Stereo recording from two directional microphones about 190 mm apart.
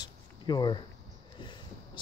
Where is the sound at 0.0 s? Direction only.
25° left (ahead or behind).